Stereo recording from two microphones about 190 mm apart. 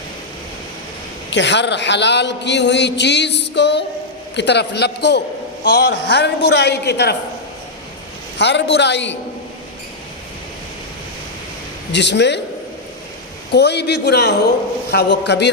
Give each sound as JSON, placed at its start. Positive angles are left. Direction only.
{"t": 1.3, "sound": "a man's voice", "side_deg": 70}
{"t": 8.4, "sound": "a man's voice", "side_deg": 65}
{"t": 11.9, "sound": "a man's voice", "side_deg": 65}
{"t": 13.5, "sound": "a man's voice", "side_deg": 60}